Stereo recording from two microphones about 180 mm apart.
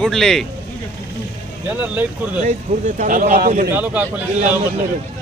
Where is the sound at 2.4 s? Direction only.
45° right (ahead or behind).